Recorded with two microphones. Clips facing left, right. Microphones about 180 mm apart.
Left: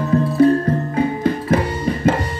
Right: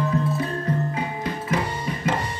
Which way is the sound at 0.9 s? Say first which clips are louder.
Left 10 dB; 35° left (ahead or behind).